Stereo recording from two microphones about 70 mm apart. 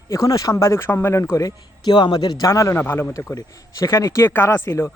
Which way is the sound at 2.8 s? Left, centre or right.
Left.